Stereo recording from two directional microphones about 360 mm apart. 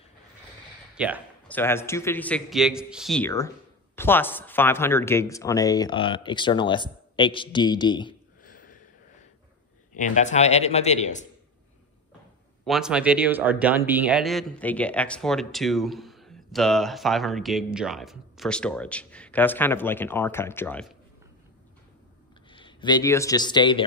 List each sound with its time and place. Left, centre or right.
0.9 s a man's voice: centre
8.5 s a sound: left
9.9 s speech: centre
12.6 s a man's voice: centre
22.5 s speech: centre